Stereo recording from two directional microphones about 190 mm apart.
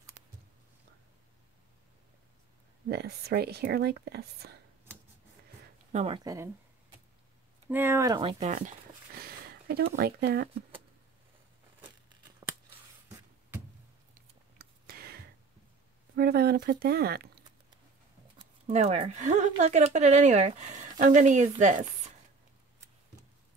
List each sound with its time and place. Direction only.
2.9 s speech: 55° right (ahead or behind)
5.9 s speech: 30° right (ahead or behind)
6.2 s speech: 15° right (ahead or behind)
7.7 s speech: 10° right (ahead or behind); by 10.5 s 60° right (ahead or behind)
14.6 s a sound: 55° right (ahead or behind)
16.2 s speech: 55° right (ahead or behind)
18.7 s speech: 35° right (ahead or behind)